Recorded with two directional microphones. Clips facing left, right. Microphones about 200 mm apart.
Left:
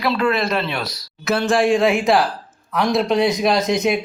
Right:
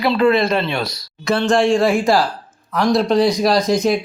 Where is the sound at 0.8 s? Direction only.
30° right (ahead or behind).